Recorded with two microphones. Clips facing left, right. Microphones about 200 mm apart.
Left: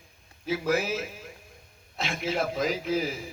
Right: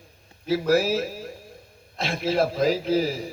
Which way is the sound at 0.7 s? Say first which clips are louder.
Right 6 dB; 35° right (ahead or behind).